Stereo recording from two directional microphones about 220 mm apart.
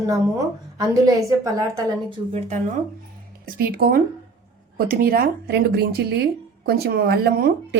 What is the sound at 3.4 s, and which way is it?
A woman's voice, 40° right (ahead or behind).